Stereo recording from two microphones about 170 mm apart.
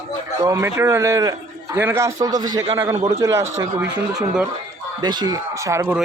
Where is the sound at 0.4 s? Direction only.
15° right (ahead or behind).